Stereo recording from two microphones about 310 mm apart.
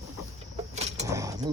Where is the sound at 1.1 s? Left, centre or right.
Centre.